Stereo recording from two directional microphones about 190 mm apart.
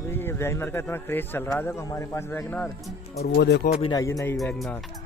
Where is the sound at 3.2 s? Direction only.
60° left (ahead or behind).